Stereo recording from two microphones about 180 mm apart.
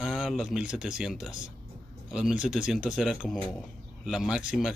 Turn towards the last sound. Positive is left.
turn(degrees=-5)  # may be behind; listen again after turning